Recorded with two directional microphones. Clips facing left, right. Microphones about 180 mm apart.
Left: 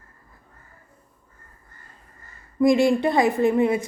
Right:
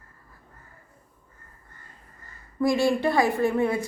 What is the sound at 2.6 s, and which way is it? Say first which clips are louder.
A woman's voice: left 5 dB; 20° left (ahead or behind).